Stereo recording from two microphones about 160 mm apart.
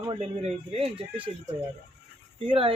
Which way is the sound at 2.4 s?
35° right (ahead or behind).